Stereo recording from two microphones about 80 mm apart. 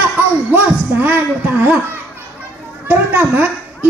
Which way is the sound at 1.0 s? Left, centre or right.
Right.